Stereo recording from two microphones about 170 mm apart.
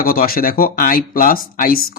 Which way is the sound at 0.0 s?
60° left (ahead or behind).